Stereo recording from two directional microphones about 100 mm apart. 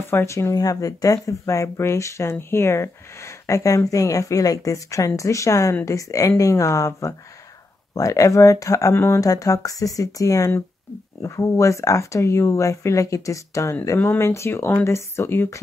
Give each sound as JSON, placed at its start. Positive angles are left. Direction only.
{"t": 0.1, "sound": "speech", "side_deg": 25}